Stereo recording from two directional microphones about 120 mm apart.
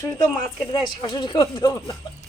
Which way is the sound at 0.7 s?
40° left (ahead or behind).